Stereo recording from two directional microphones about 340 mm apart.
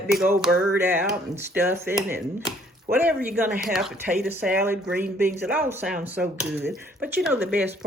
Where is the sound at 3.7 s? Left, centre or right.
Centre.